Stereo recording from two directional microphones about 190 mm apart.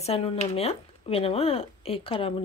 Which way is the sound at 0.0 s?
35° left (ahead or behind).